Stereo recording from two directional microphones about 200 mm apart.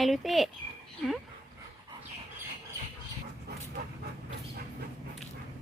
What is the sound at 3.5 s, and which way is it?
Dog, 55° right (ahead or behind).